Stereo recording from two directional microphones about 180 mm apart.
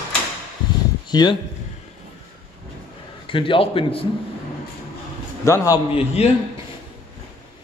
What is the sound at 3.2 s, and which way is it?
Speech, 30° left (ahead or behind).